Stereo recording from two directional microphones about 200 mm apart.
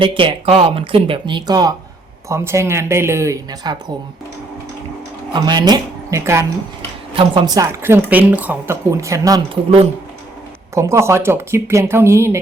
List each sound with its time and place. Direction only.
0.0 s a woman's voice: 25° right (ahead or behind)
5.3 s a woman's voice: 20° right (ahead or behind)
10.8 s a woman's voice: 15° right (ahead or behind)